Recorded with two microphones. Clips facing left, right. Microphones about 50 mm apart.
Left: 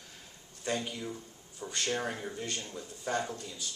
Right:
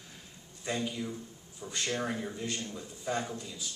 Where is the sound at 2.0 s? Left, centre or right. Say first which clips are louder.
Right 1 dB; left.